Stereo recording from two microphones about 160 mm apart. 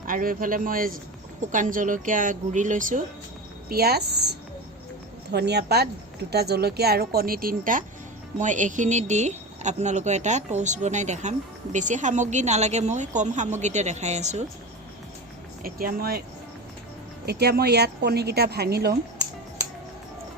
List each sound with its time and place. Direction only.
0.1 s a woman's voice: 60° right (ahead or behind)
3.7 s a woman's voice: 75° right (ahead or behind)
5.3 s a woman's voice: 90° right; by 14.4 s 45° right (ahead or behind)
15.6 s a woman's voice: 65° right (ahead or behind)
17.2 s a woman's voice: 85° right